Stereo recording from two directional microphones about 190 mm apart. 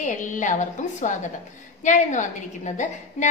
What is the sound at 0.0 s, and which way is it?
A woman's voice, 40° left (ahead or behind).